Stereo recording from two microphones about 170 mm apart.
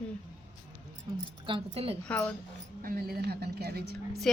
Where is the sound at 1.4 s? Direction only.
30° right (ahead or behind).